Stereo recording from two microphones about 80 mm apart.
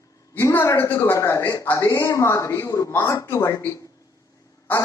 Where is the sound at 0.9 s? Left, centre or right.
Left.